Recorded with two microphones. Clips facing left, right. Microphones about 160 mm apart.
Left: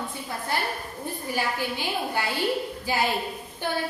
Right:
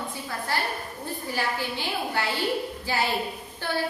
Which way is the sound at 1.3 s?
15° left (ahead or behind).